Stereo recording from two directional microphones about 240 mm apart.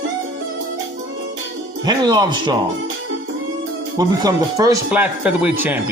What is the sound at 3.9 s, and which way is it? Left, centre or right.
A man's voice, centre.